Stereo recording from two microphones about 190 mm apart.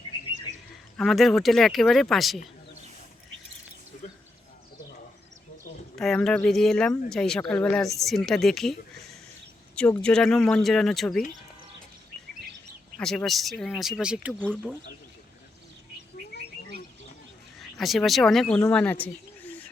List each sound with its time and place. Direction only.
0.9 s speech: centre (ahead or behind)
6.0 s speech: 5° left (ahead or behind)
9.7 s speech: 5° left (ahead or behind)
13.0 s speech: 5° left (ahead or behind)
14.4 s speech: 5° left (ahead or behind)
17.6 s speech: centre (ahead or behind)
18.7 s bird: 10° left (ahead or behind)